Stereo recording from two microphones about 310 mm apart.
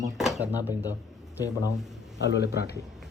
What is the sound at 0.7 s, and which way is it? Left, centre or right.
Speech, centre.